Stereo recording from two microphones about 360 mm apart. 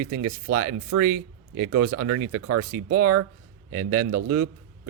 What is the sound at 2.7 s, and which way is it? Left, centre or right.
Speech, right.